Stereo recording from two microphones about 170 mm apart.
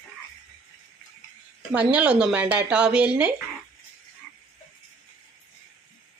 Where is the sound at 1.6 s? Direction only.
5° right (ahead or behind).